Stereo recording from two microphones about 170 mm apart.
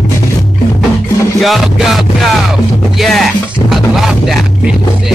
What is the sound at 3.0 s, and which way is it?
Music, centre (ahead or behind).